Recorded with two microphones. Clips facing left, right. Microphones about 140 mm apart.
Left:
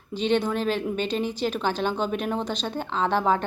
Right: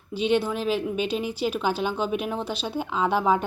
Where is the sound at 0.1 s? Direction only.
10° right (ahead or behind).